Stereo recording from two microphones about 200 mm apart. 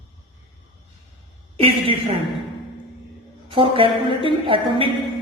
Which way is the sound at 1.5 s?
25° right (ahead or behind).